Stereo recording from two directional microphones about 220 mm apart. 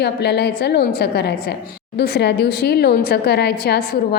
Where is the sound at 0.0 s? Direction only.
50° left (ahead or behind).